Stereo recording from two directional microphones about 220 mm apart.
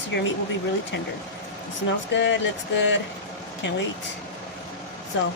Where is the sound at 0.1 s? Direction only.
50° left (ahead or behind).